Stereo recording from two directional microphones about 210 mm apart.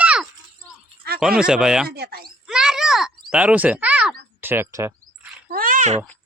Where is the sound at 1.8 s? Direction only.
50° right (ahead or behind).